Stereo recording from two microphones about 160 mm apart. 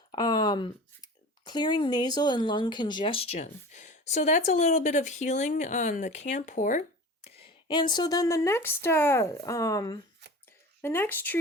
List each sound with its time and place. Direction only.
0.1 s speech: 25° left (ahead or behind)
3.3 s speech: 45° left (ahead or behind)
7.3 s speech: 35° left (ahead or behind); by 11.3 s 10° left (ahead or behind)